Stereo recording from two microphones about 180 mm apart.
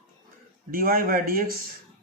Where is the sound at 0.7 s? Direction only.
55° right (ahead or behind).